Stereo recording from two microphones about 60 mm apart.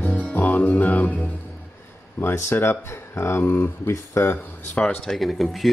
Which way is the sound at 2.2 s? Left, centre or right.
Left.